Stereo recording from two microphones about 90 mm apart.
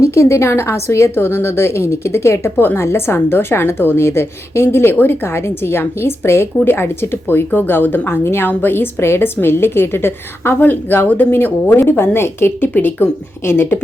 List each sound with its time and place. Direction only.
0.0 s a woman's voice: 30° left (ahead or behind)